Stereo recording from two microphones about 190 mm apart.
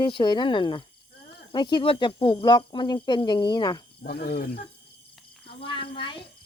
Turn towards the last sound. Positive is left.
turn(degrees=25)  # may be behind; listen again after turning